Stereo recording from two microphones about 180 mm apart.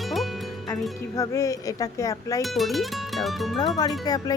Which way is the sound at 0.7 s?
20° left (ahead or behind).